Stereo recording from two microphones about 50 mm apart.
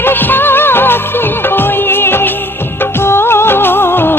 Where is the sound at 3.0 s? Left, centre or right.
Left.